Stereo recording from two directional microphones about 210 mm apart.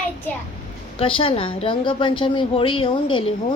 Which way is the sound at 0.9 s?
25° left (ahead or behind).